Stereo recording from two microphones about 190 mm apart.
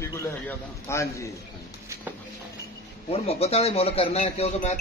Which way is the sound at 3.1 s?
30° left (ahead or behind).